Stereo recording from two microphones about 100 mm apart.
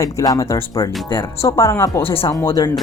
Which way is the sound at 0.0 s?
35° left (ahead or behind).